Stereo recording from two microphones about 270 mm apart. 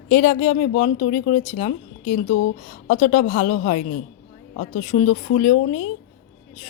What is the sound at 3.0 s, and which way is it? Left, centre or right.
Speech, left.